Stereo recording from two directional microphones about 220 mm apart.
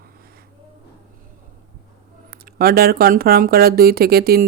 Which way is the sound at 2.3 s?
45° right (ahead or behind).